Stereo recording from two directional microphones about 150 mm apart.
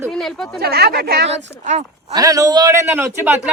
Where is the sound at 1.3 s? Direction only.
50° right (ahead or behind).